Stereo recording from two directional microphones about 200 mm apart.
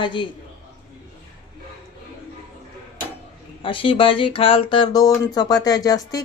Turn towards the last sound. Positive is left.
turn(degrees=20)  # may be behind; listen again after turning